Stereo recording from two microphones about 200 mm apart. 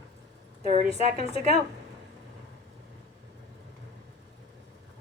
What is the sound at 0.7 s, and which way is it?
Speech, 30° left (ahead or behind).